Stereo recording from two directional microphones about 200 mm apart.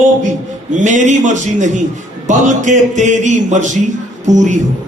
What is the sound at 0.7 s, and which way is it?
A man's voice, 40° right (ahead or behind).